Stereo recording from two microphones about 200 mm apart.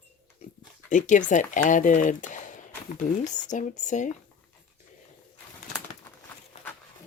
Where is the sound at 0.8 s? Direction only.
40° left (ahead or behind).